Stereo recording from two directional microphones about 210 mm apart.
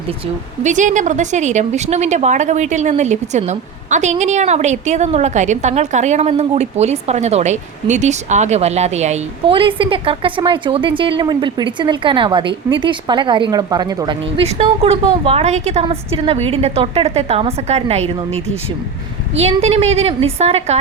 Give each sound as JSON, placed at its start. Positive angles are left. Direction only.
{"t": 0.6, "sound": "a woman's voice", "side_deg": -35}
{"t": 19.4, "sound": "speech", "side_deg": -30}